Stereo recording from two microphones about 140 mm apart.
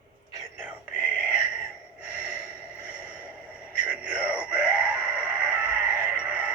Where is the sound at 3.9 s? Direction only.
5° right (ahead or behind).